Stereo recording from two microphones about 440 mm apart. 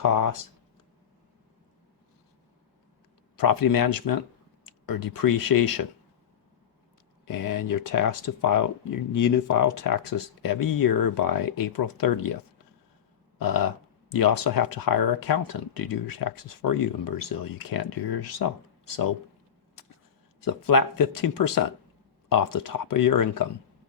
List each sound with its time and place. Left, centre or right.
0.0 s a sound: left
3.3 s speech: left
7.3 s speech: left
20.4 s speech: left